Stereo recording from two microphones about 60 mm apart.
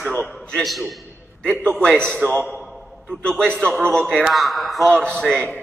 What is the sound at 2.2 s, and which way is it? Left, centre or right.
Speech, right.